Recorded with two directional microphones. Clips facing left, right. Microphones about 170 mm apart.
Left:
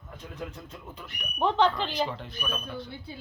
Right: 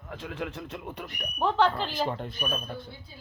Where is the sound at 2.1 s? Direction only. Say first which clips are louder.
Right 4 dB; 50° right (ahead or behind).